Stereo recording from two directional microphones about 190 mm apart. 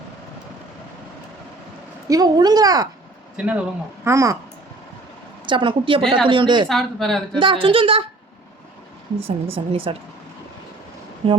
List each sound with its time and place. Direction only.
2.0 s a woman's voice: 20° right (ahead or behind)
3.3 s a woman's voice: 5° right (ahead or behind)
4.0 s speech: 15° right (ahead or behind)
5.5 s a woman's voice: 25° right (ahead or behind)
6.7 s a woman's voice: centre (ahead or behind)
7.3 s a woman's voice: 25° right (ahead or behind)
9.2 s a woman's voice: 30° right (ahead or behind)
11.2 s a woman's voice: 25° right (ahead or behind)